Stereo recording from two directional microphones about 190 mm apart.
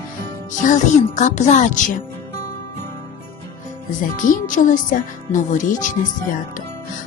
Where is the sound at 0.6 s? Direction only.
40° left (ahead or behind).